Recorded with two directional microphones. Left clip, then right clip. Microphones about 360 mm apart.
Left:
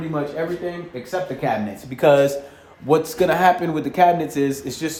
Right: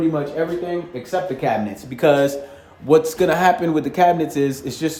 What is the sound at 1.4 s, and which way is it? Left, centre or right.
Speech, centre.